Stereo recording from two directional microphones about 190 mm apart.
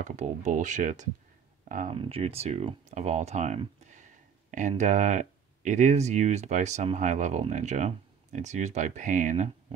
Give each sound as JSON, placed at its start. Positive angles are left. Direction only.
{"t": 0.0, "sound": "speech", "side_deg": -35}
{"t": 2.0, "sound": "speech", "side_deg": -30}